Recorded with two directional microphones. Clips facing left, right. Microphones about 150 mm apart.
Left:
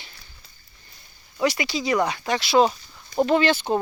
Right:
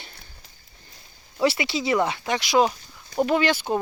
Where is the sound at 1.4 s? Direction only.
25° right (ahead or behind); by 3.7 s 10° right (ahead or behind).